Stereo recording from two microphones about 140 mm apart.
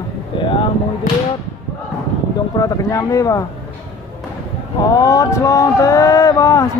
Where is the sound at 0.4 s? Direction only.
35° left (ahead or behind).